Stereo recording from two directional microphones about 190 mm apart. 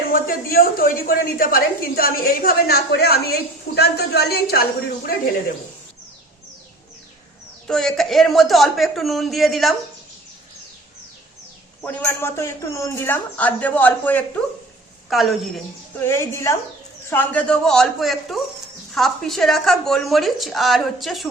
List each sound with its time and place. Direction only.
0.1 s a woman's voice: 50° left (ahead or behind)
7.7 s a woman's voice: 5° left (ahead or behind)
11.8 s a woman's voice: 10° left (ahead or behind)
16.0 s a woman's voice: 15° left (ahead or behind)